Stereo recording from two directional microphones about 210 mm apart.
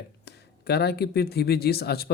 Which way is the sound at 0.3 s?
50° left (ahead or behind).